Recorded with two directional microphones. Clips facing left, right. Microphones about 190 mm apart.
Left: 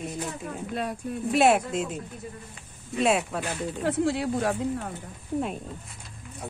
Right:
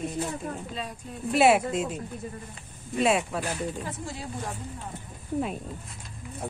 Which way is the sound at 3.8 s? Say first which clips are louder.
Left 11 dB; 70° left (ahead or behind).